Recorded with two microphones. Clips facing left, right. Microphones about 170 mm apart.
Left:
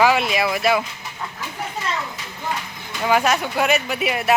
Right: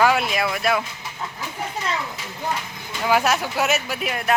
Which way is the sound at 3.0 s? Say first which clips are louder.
Left 1 dB; 5° right (ahead or behind).